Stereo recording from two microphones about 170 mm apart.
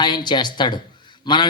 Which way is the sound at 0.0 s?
25° left (ahead or behind).